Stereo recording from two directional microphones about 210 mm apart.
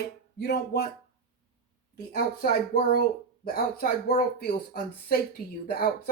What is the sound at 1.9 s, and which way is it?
A woman's voice, 45° left (ahead or behind).